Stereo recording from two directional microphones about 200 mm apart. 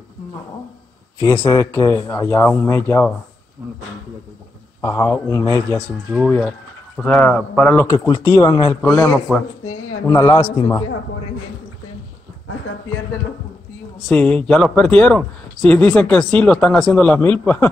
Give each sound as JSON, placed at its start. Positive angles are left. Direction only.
{"t": 1.2, "sound": "speech", "side_deg": 15}
{"t": 4.8, "sound": "speech", "side_deg": 15}
{"t": 6.1, "sound": "speech", "side_deg": 5}
{"t": 14.0, "sound": "speech", "side_deg": 5}